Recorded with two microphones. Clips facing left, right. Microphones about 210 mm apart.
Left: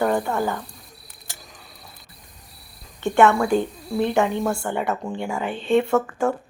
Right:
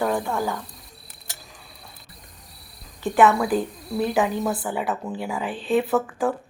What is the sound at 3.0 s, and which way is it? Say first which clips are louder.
Speech: left 1 dB; centre (ahead or behind).